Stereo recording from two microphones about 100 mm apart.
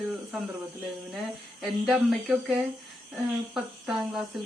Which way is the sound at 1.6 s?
Centre (ahead or behind).